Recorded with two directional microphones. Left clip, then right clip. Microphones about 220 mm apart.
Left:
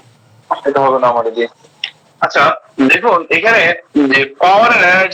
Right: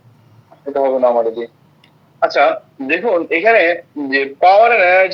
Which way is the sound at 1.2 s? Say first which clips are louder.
Left 2 dB; centre (ahead or behind).